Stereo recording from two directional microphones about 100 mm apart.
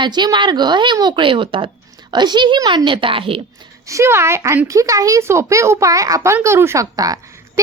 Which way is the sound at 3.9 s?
30° right (ahead or behind).